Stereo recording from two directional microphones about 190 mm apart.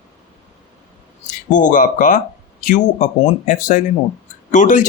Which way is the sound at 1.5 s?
45° left (ahead or behind).